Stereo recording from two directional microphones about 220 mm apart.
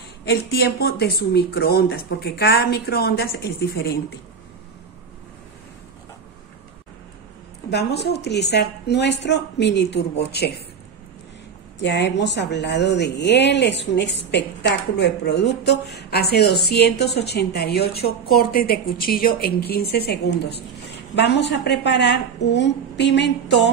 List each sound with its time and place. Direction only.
0.2 s speech: 50° left (ahead or behind)
7.7 s speech: 50° left (ahead or behind)
11.8 s speech: 50° left (ahead or behind)